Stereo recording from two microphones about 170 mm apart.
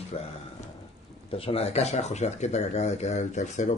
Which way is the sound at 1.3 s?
35° left (ahead or behind).